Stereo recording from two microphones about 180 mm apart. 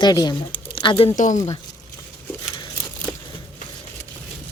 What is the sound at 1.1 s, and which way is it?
Speech, 45° left (ahead or behind).